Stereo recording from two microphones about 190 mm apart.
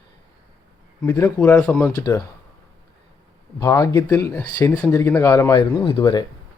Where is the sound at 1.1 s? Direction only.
20° left (ahead or behind).